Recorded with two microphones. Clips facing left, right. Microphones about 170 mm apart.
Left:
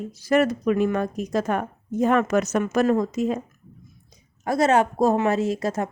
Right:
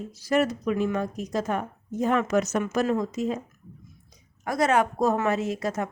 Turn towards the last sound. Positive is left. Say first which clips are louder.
# left 4 dB
turn(degrees=30)  # may be behind; listen again after turning